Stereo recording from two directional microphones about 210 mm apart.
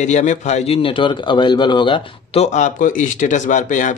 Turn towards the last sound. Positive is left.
turn(degrees=35)  # may be behind; listen again after turning